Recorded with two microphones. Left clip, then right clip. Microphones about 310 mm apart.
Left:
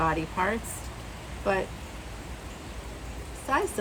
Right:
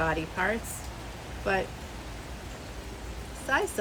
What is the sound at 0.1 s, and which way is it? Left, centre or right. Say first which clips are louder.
Speech: left 1 dB; centre.